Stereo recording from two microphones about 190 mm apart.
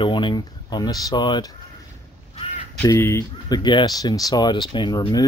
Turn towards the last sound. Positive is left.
turn(degrees=25)  # may be behind; listen again after turning